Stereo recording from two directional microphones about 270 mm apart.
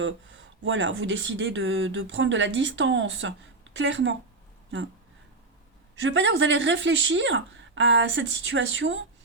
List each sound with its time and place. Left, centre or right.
0.6 s speech: right
6.0 s speech: right